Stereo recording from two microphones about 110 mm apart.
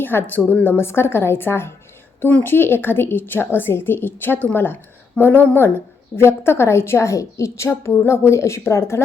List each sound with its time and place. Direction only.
0.0 s a woman's voice: 20° left (ahead or behind)